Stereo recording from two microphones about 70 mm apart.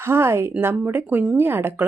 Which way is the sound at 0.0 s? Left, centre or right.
Right.